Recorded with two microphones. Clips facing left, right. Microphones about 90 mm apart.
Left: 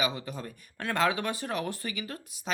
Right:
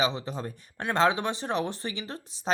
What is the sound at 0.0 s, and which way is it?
A woman's voice, 25° right (ahead or behind).